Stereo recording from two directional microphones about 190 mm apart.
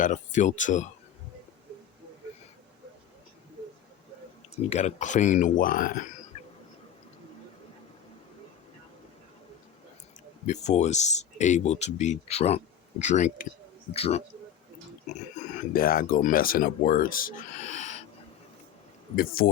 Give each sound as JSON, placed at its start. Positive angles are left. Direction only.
{"t": 0.0, "sound": "speech", "side_deg": 40}
{"t": 4.7, "sound": "speech", "side_deg": 35}
{"t": 10.4, "sound": "speech", "side_deg": 35}
{"t": 19.1, "sound": "speech", "side_deg": 50}